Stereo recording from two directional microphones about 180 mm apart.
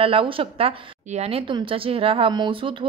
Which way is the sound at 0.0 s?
30° right (ahead or behind).